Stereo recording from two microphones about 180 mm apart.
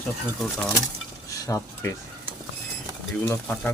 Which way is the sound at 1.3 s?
20° left (ahead or behind).